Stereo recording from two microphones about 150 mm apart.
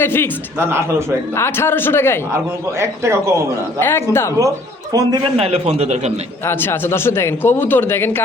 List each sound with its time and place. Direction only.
0.0 s a man's voice: 15° left (ahead or behind)
0.6 s a man's voice: 15° right (ahead or behind)
1.4 s a man's voice: 15° left (ahead or behind)
2.3 s a man's voice: 20° right (ahead or behind)
3.8 s a man's voice: 15° left (ahead or behind)
4.4 s a man's voice: 20° right (ahead or behind)
5.2 s a man's voice: 45° right (ahead or behind)
6.4 s a man's voice: 15° left (ahead or behind)